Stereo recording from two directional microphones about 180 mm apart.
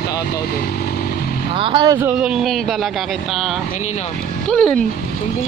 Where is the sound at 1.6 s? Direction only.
25° right (ahead or behind).